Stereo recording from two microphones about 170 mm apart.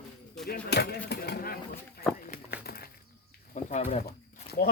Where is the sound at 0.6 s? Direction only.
75° left (ahead or behind).